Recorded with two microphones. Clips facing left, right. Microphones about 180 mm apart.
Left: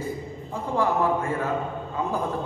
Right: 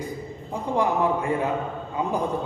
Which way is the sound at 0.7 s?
15° right (ahead or behind).